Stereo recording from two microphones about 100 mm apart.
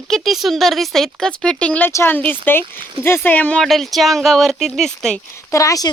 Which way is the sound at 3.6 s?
Centre (ahead or behind).